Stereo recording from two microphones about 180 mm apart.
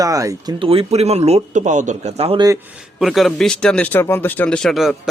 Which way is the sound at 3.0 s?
Centre (ahead or behind).